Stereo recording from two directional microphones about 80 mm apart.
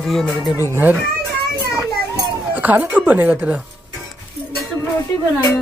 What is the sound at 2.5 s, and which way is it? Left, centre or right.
Speech, right.